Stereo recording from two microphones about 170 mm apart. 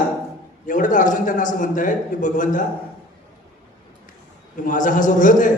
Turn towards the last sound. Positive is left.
turn(degrees=50)  # may be behind; listen again after turning